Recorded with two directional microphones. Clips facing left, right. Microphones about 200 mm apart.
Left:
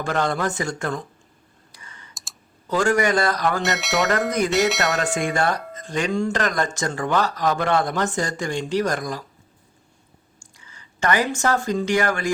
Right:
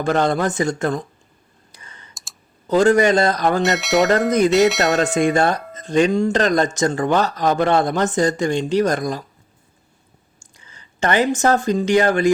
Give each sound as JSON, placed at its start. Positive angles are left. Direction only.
{"t": 0.0, "sound": "speech", "side_deg": -20}
{"t": 1.7, "sound": "clicking", "side_deg": -20}
{"t": 2.6, "sound": "speech", "side_deg": -20}
{"t": 3.6, "sound": "speech", "side_deg": 0}
{"t": 5.1, "sound": "speech", "side_deg": -25}
{"t": 10.7, "sound": "a sound", "side_deg": -20}
{"t": 11.5, "sound": "speech", "side_deg": -20}